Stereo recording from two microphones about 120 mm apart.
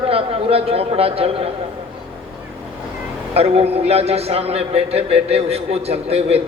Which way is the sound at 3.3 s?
55° right (ahead or behind).